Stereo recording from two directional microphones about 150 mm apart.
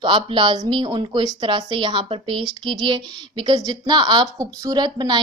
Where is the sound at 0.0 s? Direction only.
35° right (ahead or behind).